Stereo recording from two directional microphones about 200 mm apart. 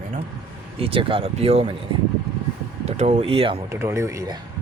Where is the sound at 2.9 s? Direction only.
35° right (ahead or behind).